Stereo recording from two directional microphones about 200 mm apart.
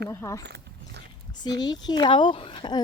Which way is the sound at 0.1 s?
15° left (ahead or behind).